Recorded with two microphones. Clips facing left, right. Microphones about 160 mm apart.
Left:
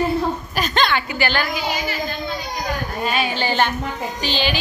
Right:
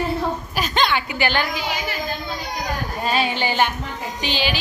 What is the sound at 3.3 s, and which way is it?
A woman's voice, 15° right (ahead or behind).